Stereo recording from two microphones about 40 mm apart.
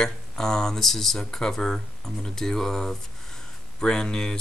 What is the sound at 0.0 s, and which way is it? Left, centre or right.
Speech, centre.